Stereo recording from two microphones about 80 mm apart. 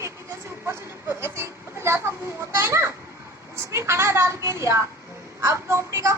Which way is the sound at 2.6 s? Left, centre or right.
Right.